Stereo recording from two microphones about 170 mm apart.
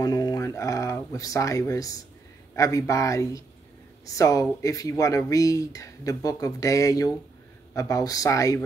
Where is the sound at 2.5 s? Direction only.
20° left (ahead or behind).